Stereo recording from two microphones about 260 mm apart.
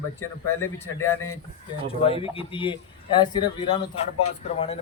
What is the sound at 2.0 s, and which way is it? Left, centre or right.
Speech, left.